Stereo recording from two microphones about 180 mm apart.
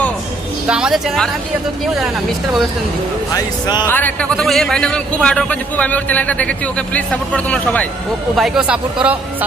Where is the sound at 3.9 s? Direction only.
10° left (ahead or behind).